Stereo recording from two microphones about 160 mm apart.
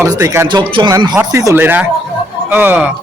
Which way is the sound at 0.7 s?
30° right (ahead or behind).